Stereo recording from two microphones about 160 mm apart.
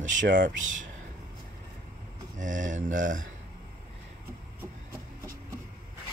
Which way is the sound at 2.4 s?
55° right (ahead or behind).